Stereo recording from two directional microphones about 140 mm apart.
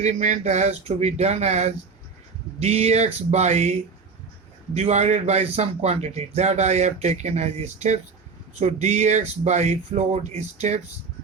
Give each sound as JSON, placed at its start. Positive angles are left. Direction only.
{"t": 0.0, "sound": "speech", "side_deg": -55}